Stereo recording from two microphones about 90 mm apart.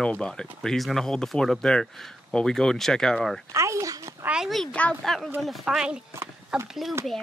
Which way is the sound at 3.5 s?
35° right (ahead or behind).